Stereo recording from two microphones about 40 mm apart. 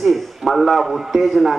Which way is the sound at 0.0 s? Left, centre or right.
Centre.